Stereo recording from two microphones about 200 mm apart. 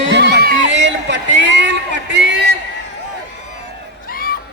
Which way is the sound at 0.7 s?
60° right (ahead or behind).